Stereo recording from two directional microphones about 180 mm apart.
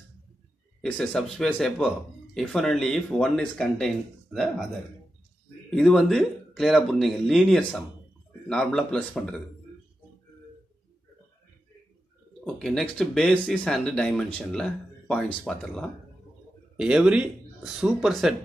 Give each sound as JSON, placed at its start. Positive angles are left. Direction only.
{"t": 0.8, "sound": "speech", "side_deg": 5}
{"t": 5.8, "sound": "speech", "side_deg": 0}
{"t": 12.4, "sound": "speech", "side_deg": 0}